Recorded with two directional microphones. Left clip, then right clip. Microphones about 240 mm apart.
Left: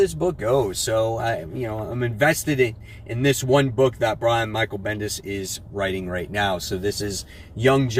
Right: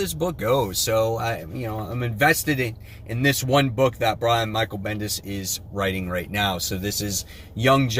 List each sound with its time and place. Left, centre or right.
0.2 s speech: right